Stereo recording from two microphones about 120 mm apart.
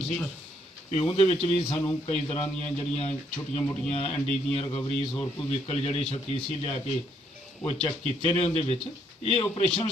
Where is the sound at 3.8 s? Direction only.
55° left (ahead or behind).